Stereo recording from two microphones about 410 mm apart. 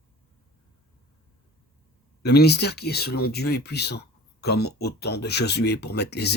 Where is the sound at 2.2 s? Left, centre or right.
Left.